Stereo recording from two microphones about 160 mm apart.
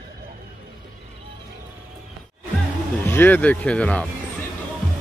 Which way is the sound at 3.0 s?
15° left (ahead or behind).